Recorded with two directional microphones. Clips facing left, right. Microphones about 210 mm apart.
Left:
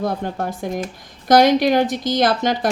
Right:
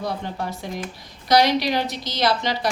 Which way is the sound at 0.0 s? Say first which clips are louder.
Left 5 dB; 50° left (ahead or behind).